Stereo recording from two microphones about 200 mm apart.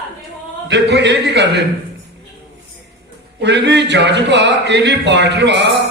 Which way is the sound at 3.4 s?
60° right (ahead or behind).